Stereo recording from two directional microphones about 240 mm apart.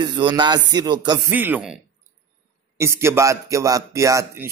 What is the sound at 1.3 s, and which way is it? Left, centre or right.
Speech, centre.